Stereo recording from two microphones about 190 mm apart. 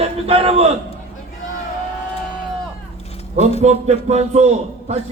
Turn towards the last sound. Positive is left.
turn(degrees=-35)  # may be behind; listen again after turning